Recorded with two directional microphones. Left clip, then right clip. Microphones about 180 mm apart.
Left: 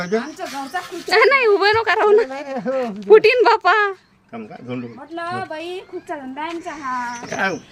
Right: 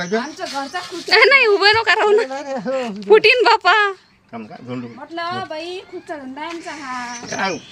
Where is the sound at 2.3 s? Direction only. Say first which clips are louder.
Right 1 dB; 20° left (ahead or behind).